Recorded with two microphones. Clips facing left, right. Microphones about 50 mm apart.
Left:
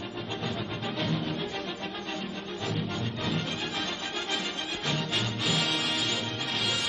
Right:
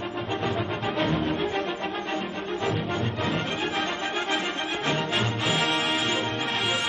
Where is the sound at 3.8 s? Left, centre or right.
Right.